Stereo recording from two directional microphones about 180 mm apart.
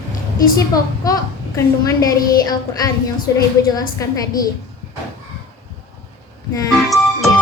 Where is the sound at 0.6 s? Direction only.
20° left (ahead or behind).